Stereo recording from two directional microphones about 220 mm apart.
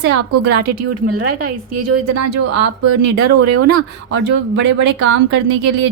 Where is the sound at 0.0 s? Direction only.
50° right (ahead or behind).